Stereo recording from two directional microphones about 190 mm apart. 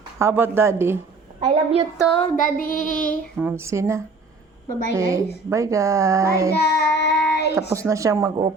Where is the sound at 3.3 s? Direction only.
10° right (ahead or behind).